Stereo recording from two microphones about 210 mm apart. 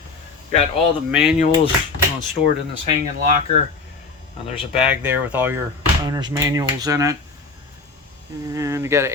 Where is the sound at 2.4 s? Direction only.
25° left (ahead or behind).